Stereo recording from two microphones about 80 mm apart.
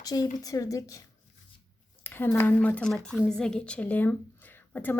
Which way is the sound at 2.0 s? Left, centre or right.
Left.